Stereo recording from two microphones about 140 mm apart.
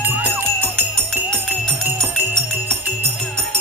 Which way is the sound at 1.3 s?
5° left (ahead or behind).